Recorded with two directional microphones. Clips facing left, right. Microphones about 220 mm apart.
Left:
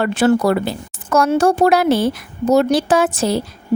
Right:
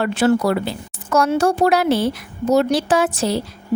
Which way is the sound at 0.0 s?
50° left (ahead or behind).